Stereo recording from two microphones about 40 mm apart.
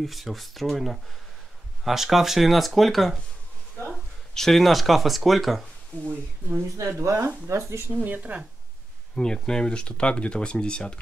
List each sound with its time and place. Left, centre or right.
0.0 s speech: centre
4.3 s speech: centre
6.0 s speech: right
7.9 s speech: right
9.1 s speech: centre